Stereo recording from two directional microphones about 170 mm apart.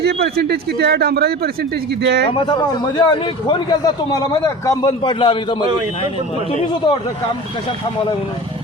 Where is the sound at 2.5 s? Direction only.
25° left (ahead or behind).